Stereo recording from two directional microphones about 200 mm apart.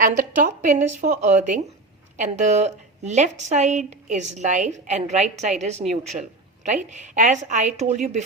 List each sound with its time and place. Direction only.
0.0 s a woman's voice: 40° right (ahead or behind)